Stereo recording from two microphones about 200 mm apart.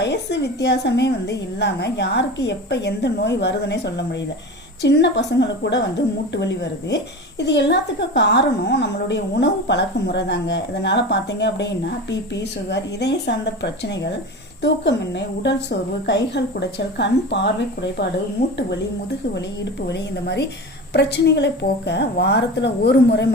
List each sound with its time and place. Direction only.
0.0 s a woman's voice: 60° left (ahead or behind)
19.9 s a woman's voice: 55° left (ahead or behind)